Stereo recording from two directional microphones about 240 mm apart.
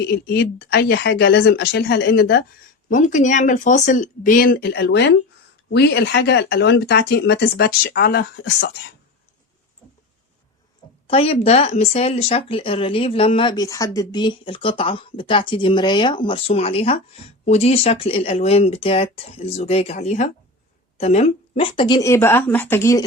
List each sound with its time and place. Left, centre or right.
0.1 s speech: left
2.9 s speech: left
11.0 s speech: left